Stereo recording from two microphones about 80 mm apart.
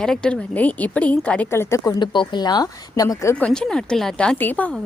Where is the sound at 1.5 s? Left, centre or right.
Left.